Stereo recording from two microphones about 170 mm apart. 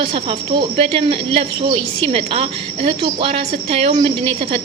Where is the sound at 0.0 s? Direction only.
30° right (ahead or behind).